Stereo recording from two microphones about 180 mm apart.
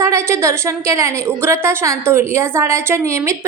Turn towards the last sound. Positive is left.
turn(degrees=-15)  # may be behind; listen again after turning